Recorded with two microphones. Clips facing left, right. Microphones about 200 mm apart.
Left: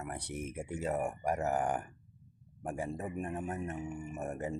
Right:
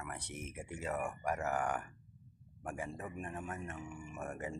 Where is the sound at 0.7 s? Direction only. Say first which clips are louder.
Left 5 dB; 35° left (ahead or behind).